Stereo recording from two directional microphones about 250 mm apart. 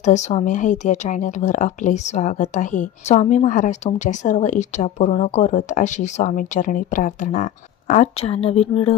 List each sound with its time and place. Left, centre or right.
0.0 s speech: left